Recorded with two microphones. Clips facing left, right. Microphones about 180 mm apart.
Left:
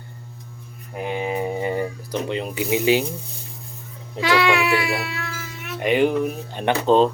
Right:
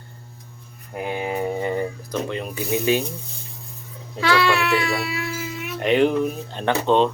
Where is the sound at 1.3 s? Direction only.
15° left (ahead or behind).